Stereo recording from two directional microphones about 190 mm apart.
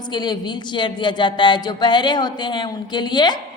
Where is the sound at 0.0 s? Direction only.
20° left (ahead or behind).